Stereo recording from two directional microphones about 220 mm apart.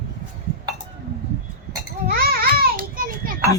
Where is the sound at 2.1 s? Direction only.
45° right (ahead or behind).